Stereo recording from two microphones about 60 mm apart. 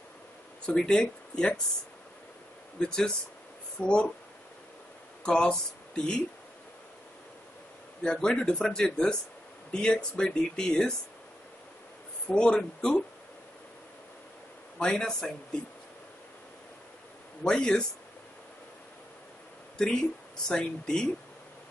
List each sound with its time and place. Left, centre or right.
0.7 s speech: centre
2.8 s speech: centre
5.2 s speech: centre
8.0 s speech: centre
12.3 s speech: centre
14.8 s speech: centre
17.4 s speech: centre
20.4 s speech: centre